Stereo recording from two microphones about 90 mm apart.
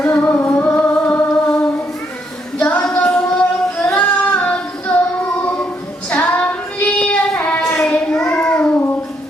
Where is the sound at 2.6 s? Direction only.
10° left (ahead or behind).